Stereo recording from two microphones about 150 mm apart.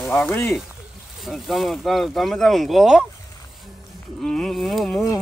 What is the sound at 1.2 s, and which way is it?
Speech, centre (ahead or behind).